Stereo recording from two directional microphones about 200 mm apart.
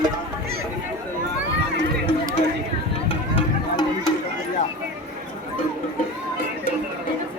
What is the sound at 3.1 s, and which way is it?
Music, 25° left (ahead or behind).